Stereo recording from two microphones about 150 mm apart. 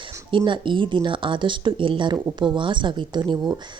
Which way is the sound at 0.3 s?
35° right (ahead or behind).